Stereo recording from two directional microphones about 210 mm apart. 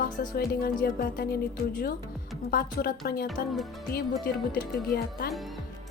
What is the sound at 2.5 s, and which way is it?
Speech, 45° left (ahead or behind).